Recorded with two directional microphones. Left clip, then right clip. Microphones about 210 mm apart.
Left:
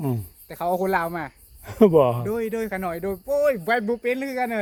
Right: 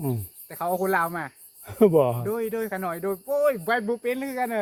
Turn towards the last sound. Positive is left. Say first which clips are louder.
# left 2 dB
turn(degrees=55)  # may be behind; listen again after turning